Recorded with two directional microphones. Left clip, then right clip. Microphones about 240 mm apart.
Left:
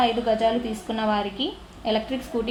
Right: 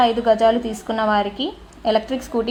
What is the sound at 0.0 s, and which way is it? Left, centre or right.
A woman's voice, right.